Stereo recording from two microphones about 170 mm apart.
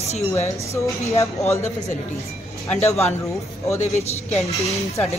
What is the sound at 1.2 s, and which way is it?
Speech, 15° left (ahead or behind).